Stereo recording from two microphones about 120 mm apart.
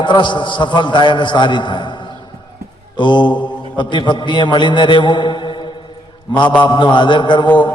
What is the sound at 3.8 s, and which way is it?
A man's voice, 40° left (ahead or behind).